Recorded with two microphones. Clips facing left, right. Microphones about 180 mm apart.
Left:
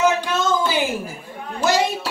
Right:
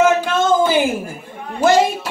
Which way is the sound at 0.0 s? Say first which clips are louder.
Right 4 dB; 50° right (ahead or behind).